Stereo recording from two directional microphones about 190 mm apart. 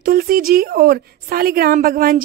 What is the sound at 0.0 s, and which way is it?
A woman's voice, 50° right (ahead or behind).